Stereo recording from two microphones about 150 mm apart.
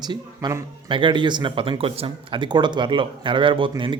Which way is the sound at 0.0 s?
30° right (ahead or behind).